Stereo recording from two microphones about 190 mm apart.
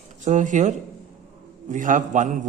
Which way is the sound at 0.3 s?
40° right (ahead or behind).